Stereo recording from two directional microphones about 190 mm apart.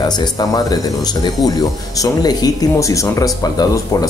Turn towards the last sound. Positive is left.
turn(degrees=20)  # may be behind; listen again after turning